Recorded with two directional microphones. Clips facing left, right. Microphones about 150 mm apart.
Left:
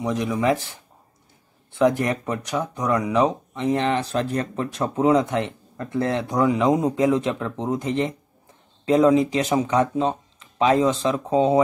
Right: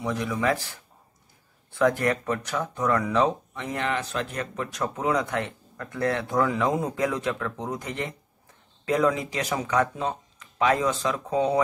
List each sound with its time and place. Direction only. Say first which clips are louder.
0.0 s speech: left 4 dB; 20° left (ahead or behind)